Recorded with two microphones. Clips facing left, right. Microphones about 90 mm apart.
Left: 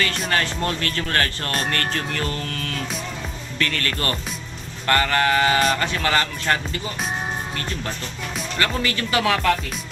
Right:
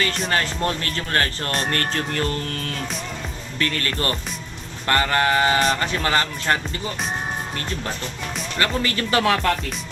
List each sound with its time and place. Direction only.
0.3 s music: 25° right (ahead or behind)
3.6 s music: 25° right (ahead or behind)
8.5 s speech: 30° right (ahead or behind)